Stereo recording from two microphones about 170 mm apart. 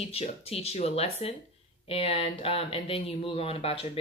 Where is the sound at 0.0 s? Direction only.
35° left (ahead or behind).